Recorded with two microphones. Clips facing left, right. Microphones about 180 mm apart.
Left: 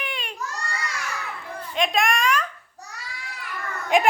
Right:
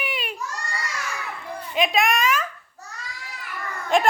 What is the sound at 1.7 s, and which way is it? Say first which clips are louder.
Speech: right 1 dB; 5° right (ahead or behind).